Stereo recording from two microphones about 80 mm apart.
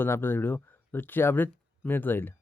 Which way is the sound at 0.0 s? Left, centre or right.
Left.